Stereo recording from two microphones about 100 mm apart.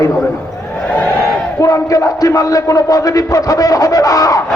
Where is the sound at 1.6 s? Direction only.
35° left (ahead or behind).